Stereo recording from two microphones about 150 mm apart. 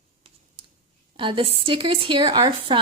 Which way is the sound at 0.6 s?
35° right (ahead or behind).